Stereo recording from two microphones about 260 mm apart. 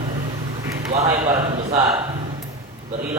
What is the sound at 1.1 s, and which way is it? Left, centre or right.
Speech, right.